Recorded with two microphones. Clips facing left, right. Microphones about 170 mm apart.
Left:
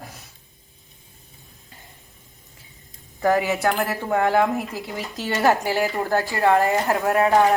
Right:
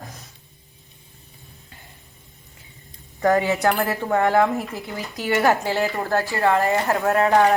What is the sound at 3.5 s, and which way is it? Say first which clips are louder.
Speech: right 2 dB; centre (ahead or behind).